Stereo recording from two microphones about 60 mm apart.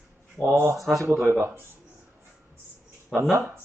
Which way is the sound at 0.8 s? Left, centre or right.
Centre.